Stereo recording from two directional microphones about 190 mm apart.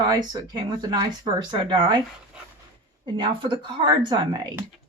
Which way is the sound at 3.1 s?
25° right (ahead or behind).